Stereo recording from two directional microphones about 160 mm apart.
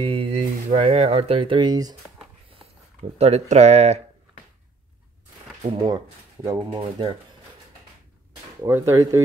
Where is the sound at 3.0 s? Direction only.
40° right (ahead or behind).